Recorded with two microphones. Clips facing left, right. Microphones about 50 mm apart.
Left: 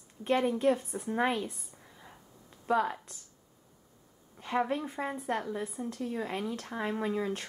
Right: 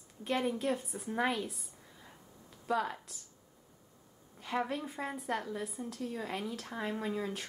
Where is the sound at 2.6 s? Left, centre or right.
Centre.